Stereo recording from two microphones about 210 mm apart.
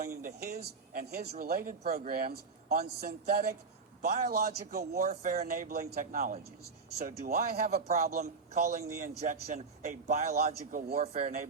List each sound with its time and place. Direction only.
0.2 s speech: 45° right (ahead or behind)
4.9 s speech: 35° right (ahead or behind)
7.7 s speech: 35° right (ahead or behind)